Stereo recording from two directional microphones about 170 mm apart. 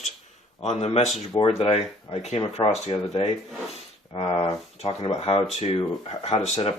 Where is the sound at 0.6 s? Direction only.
40° left (ahead or behind).